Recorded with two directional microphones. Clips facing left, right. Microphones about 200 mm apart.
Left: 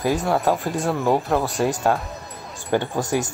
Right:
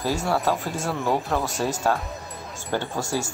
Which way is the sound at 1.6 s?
15° left (ahead or behind).